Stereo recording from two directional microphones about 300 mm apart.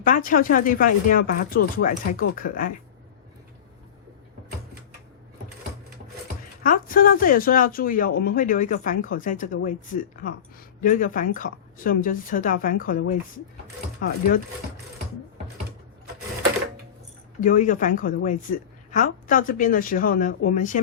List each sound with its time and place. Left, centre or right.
0.0 s a woman's voice: left
6.6 s a woman's voice: left
17.7 s a woman's voice: left